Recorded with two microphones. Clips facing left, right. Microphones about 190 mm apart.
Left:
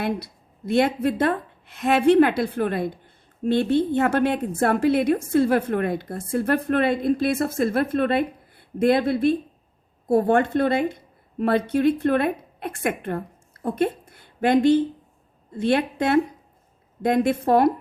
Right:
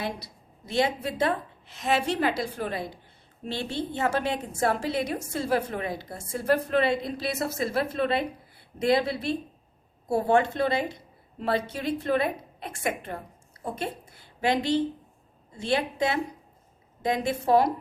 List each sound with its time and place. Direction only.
0.0 s a woman's voice: 55° left (ahead or behind)